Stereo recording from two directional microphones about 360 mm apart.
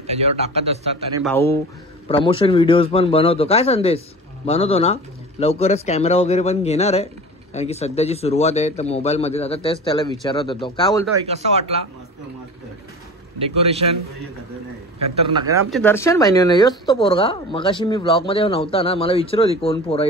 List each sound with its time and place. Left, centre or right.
0.0 s a man's voice: centre
1.2 s speech: centre
11.2 s a man's voice: centre
13.6 s a man's voice: centre
15.7 s speech: centre